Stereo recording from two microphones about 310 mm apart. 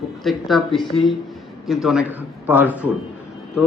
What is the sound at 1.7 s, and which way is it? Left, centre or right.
A man's voice, centre.